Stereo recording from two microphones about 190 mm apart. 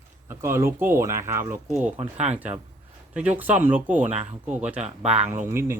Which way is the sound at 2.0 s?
35° right (ahead or behind).